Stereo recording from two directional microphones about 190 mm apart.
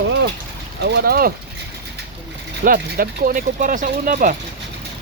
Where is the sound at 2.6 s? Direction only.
50° right (ahead or behind).